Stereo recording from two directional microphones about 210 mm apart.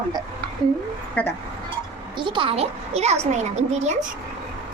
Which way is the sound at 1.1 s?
5° left (ahead or behind).